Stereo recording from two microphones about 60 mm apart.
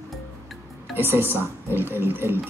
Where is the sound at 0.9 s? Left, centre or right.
Right.